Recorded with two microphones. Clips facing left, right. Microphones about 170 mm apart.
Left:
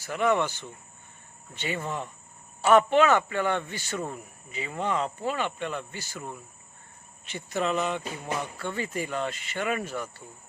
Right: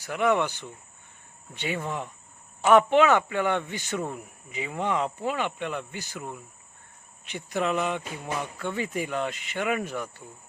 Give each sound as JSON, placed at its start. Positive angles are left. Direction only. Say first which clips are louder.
{"t": 0.0, "sound": "speech", "louder": "right 1 dB", "side_deg": -10}